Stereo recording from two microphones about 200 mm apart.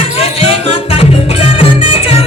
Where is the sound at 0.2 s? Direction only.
30° left (ahead or behind).